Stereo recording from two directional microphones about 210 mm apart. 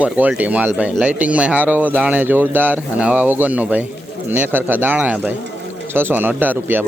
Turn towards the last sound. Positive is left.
turn(degrees=-10)  # may be behind; listen again after turning